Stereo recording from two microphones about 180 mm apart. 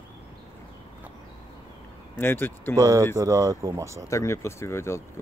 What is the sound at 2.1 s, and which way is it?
Speech, 10° left (ahead or behind).